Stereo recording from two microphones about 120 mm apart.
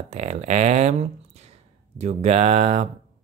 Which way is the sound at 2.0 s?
65° right (ahead or behind).